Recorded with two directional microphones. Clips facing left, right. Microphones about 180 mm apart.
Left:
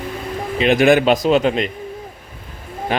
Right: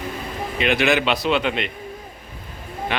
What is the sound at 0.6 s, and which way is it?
Speech, 45° left (ahead or behind).